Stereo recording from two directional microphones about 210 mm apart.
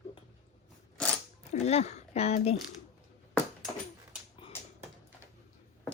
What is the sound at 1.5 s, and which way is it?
Speech, 30° left (ahead or behind).